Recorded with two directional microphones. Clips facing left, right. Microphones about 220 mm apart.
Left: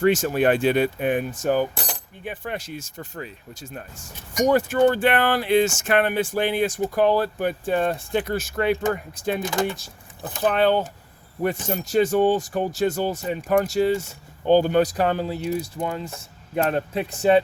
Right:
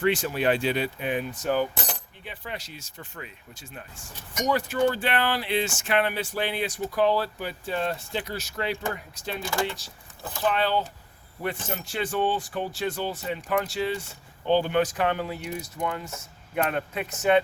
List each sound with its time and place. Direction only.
0.0 s speech: 45° left (ahead or behind)
9.4 s speech: 20° left (ahead or behind)
9.6 s speech: 50° left (ahead or behind)